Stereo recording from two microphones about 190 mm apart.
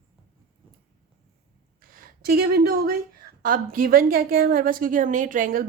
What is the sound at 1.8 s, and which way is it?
A woman's voice, 50° right (ahead or behind).